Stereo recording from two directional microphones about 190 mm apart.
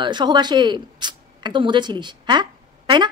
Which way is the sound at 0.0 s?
25° right (ahead or behind).